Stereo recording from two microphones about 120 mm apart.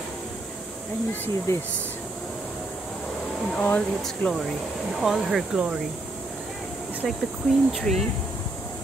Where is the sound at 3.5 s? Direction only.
15° left (ahead or behind).